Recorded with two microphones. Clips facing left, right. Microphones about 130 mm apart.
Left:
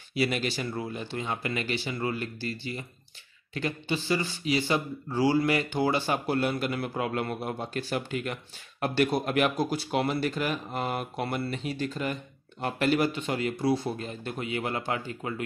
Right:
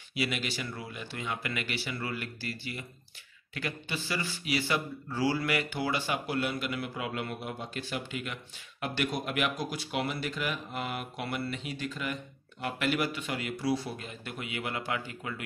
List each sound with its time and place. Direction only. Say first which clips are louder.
0.1 s a man's voice: left 5 dB; 35° left (ahead or behind)